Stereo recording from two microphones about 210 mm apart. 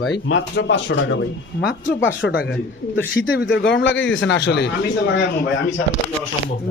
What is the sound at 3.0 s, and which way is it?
Speech, 60° left (ahead or behind).